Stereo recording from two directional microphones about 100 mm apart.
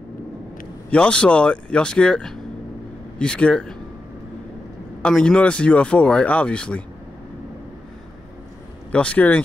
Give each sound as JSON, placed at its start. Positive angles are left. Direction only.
{"t": 0.8, "sound": "speech", "side_deg": 10}
{"t": 5.0, "sound": "speech", "side_deg": 10}
{"t": 8.9, "sound": "speech", "side_deg": 15}